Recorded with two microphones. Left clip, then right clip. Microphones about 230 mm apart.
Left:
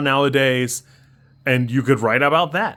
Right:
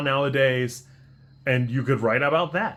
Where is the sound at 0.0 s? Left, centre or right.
Left.